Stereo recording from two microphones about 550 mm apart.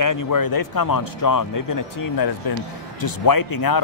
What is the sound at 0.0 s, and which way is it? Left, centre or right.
Speech, left.